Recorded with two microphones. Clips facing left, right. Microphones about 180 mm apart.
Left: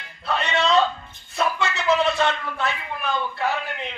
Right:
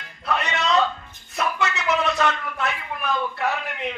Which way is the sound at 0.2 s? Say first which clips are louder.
Left 2 dB; 30° left (ahead or behind).